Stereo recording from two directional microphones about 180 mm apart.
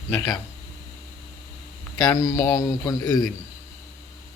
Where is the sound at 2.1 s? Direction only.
15° left (ahead or behind).